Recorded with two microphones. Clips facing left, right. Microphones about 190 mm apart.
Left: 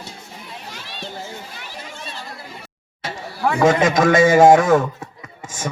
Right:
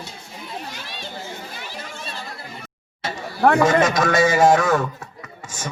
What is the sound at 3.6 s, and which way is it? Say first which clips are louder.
A man's voice: left 3 dB; 50° left (ahead or behind).